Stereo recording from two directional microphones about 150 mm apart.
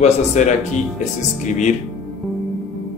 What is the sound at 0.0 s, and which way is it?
Speech, 50° left (ahead or behind).